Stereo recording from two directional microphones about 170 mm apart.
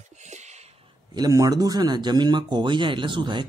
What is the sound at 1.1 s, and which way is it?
Speech, 20° right (ahead or behind).